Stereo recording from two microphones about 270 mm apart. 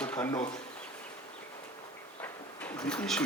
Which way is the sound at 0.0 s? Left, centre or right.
Centre.